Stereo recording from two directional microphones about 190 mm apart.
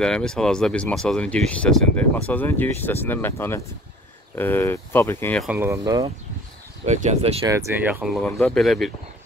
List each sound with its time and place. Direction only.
0.0 s speech: 5° left (ahead or behind)
5.4 s speech: 10° right (ahead or behind)
6.9 s speech: 35° right (ahead or behind)
7.4 s speech: 10° right (ahead or behind)